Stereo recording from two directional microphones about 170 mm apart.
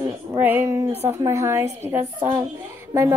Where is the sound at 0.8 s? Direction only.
40° right (ahead or behind).